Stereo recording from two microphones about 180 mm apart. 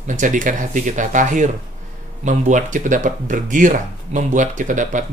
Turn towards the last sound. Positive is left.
turn(degrees=-45)  # may be behind; listen again after turning